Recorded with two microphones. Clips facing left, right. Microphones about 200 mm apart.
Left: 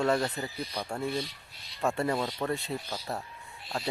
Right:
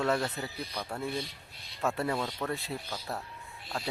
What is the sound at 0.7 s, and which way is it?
Speech, 15° left (ahead or behind).